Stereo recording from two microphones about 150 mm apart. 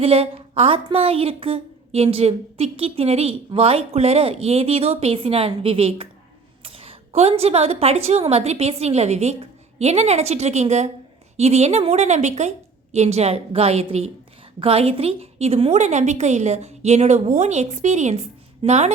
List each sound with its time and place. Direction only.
0.0 s a woman's voice: 40° right (ahead or behind)